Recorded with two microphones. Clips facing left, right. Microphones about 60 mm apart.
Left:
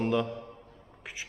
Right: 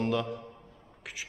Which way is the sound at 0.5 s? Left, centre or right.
Centre.